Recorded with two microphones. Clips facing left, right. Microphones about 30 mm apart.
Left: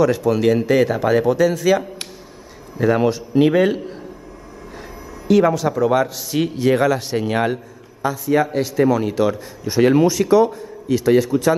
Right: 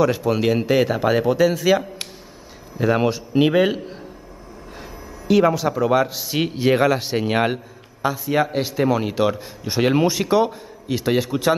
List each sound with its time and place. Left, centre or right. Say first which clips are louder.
0.0 s a man's voice: left 3 dB; centre
5.3 s a man's voice: left 2 dB; centre